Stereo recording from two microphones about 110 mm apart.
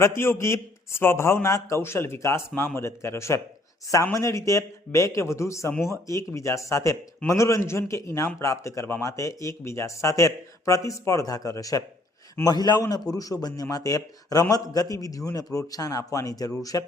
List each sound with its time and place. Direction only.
0.0 s a man's voice: 20° left (ahead or behind)